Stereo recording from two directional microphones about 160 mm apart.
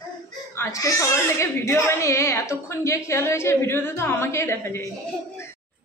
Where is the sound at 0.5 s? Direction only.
20° left (ahead or behind).